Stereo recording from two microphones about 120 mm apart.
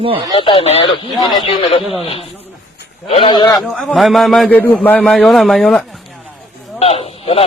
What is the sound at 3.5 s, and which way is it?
Speech, centre (ahead or behind).